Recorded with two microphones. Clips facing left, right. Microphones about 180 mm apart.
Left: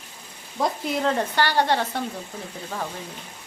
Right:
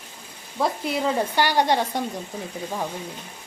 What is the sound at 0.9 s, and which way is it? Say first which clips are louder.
A woman's voice: right 1 dB; 10° right (ahead or behind).